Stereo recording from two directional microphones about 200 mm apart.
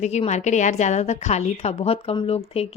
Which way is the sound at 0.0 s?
35° left (ahead or behind).